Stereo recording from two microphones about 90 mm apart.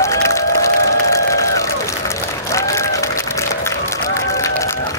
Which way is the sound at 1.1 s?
35° left (ahead or behind).